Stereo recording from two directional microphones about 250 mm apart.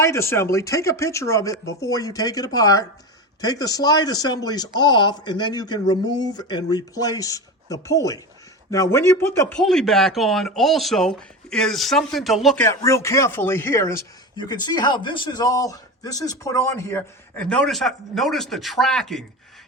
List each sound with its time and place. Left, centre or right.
0.0 s a man's voice: centre